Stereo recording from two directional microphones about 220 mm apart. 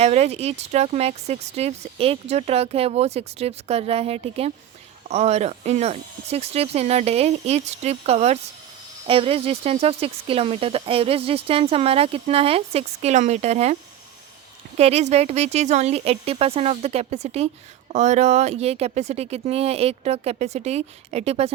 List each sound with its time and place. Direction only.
0.0 s speech: 30° right (ahead or behind)
14.8 s speech: 30° right (ahead or behind)